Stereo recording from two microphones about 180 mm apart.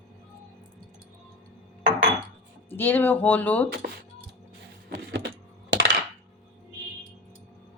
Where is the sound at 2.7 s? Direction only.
10° left (ahead or behind).